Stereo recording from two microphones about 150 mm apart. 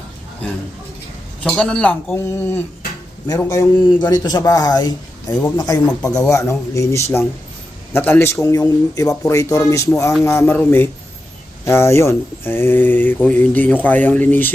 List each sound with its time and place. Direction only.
1.5 s a man's voice: 5° left (ahead or behind)